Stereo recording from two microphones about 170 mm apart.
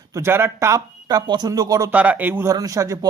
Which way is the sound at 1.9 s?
10° right (ahead or behind).